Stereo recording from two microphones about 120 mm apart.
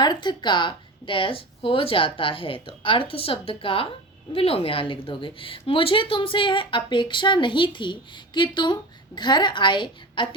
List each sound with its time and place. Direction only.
0.0 s a woman's voice: 35° left (ahead or behind)